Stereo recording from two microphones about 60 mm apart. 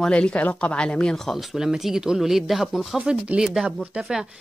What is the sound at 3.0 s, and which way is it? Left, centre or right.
Speech, centre.